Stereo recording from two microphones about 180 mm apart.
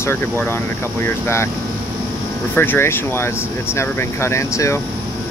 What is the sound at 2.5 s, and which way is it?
Speech, 10° left (ahead or behind).